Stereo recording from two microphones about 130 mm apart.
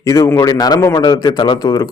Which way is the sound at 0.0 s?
25° left (ahead or behind).